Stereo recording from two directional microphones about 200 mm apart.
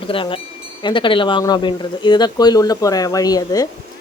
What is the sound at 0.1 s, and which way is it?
Speech, 25° left (ahead or behind).